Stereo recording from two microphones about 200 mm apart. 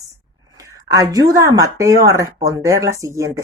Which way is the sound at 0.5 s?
15° right (ahead or behind).